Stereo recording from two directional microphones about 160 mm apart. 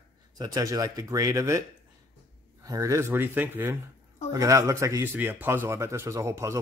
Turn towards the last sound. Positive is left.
turn(degrees=-20)  # may be behind; listen again after turning